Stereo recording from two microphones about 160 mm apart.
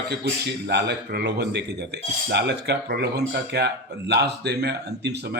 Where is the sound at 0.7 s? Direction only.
90° right.